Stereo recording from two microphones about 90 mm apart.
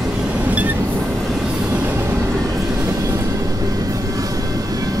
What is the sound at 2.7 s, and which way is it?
Train, 40° right (ahead or behind).